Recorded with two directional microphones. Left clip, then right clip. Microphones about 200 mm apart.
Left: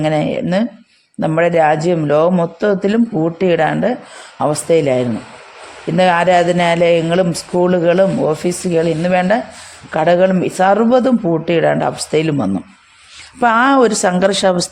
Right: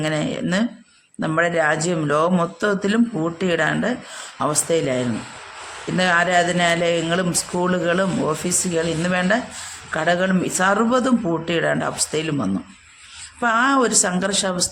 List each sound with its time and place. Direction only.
0.0 s a man's voice: 25° left (ahead or behind)